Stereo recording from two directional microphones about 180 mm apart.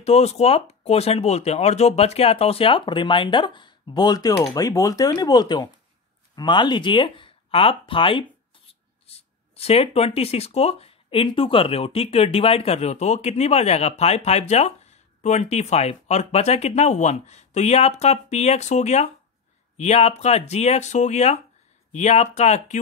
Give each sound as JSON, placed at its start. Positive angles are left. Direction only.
{"t": 0.0, "sound": "speech", "side_deg": 35}